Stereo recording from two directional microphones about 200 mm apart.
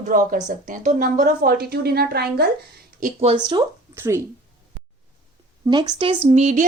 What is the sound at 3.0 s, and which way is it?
Speech, 40° right (ahead or behind).